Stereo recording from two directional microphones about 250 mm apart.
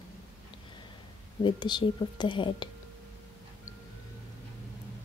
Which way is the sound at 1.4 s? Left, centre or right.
Centre.